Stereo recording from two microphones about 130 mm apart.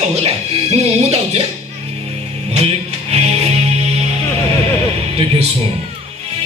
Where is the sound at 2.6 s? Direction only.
50° right (ahead or behind).